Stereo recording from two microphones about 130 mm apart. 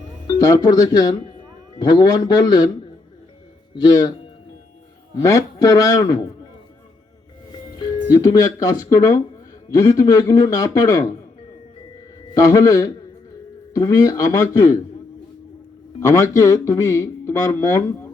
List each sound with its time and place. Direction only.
0.3 s speech: 30° left (ahead or behind)
3.8 s speech: 30° left (ahead or behind)
5.1 s speech: 25° left (ahead or behind)
8.1 s speech: 30° left (ahead or behind)
12.3 s speech: 25° left (ahead or behind)
16.0 s speech: 20° left (ahead or behind)